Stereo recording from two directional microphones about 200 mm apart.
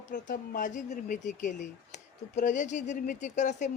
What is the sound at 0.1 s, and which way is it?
Speech, 40° left (ahead or behind).